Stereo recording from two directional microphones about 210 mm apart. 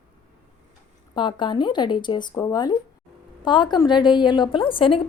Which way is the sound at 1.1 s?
20° left (ahead or behind).